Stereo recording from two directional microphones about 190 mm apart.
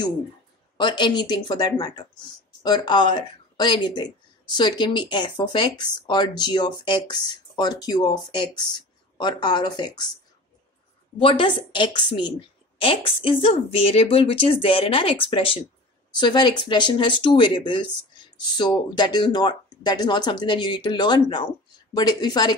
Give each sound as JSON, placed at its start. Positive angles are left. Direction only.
{"t": 0.7, "sound": "speech", "side_deg": 25}
{"t": 11.1, "sound": "speech", "side_deg": 30}